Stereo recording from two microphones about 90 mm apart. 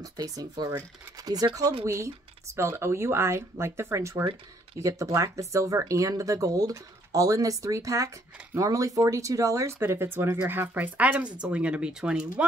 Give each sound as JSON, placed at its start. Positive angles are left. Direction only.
{"t": 0.0, "sound": "speech", "side_deg": -45}